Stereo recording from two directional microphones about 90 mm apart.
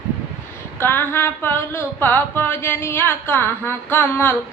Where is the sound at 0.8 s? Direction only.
25° left (ahead or behind).